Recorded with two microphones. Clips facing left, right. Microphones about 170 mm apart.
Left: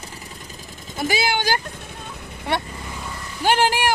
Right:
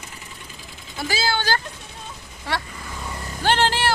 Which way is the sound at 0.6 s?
45° left (ahead or behind).